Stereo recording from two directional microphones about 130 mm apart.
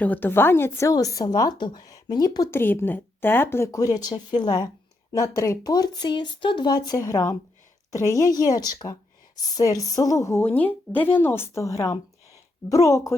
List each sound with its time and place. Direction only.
0.0 s a woman's voice: 15° left (ahead or behind)
2.6 s a woman's voice: 15° left (ahead or behind)